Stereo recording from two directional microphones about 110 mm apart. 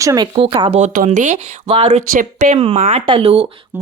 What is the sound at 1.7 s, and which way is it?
Speech, 60° right (ahead or behind).